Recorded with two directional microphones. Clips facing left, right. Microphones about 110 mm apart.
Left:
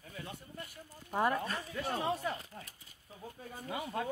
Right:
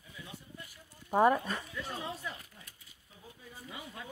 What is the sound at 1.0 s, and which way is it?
Speech, 40° right (ahead or behind).